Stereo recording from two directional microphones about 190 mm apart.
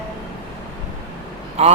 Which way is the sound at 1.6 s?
35° right (ahead or behind).